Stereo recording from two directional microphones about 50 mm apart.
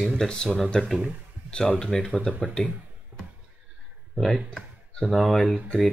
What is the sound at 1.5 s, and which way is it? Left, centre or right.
Speech, centre.